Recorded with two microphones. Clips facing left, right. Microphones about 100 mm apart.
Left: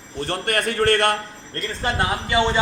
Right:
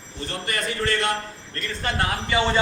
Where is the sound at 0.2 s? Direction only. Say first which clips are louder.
Left 5 dB; 60° left (ahead or behind).